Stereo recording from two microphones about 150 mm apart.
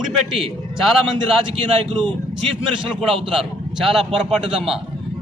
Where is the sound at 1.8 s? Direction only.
40° right (ahead or behind).